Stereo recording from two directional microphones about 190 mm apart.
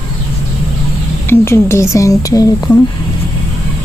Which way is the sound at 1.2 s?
15° left (ahead or behind).